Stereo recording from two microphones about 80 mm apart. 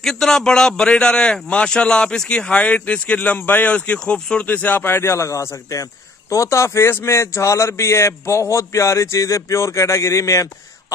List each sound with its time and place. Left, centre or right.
0.0 s a man's voice: centre; by 10.5 s left